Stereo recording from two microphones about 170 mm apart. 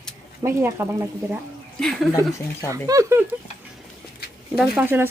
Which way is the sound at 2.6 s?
20° right (ahead or behind).